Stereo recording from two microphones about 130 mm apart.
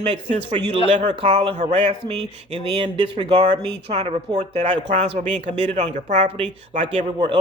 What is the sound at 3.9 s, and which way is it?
A man's voice, 55° right (ahead or behind).